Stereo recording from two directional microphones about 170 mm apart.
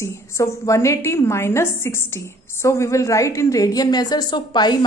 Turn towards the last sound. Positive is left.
turn(degrees=25)  # may be behind; listen again after turning